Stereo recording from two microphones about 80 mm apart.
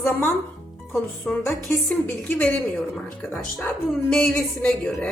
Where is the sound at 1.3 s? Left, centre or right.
Centre.